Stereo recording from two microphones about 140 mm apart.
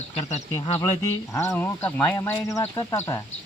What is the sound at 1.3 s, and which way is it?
Speech, 20° left (ahead or behind).